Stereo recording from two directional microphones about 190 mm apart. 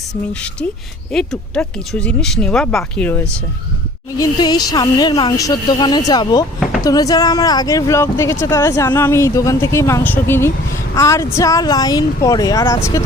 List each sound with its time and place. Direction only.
0.1 s speech: 5° left (ahead or behind)
4.2 s speech: 20° left (ahead or behind)